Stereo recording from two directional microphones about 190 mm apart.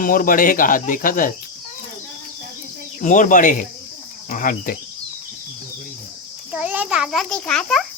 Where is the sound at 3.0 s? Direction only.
40° left (ahead or behind).